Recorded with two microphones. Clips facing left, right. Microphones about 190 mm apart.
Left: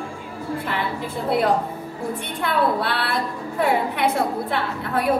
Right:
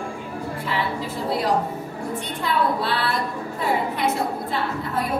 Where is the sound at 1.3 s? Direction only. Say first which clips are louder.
Left 3 dB; 55° left (ahead or behind).